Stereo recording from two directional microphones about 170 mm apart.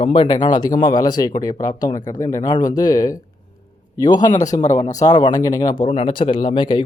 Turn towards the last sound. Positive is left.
turn(degrees=30)  # may be behind; listen again after turning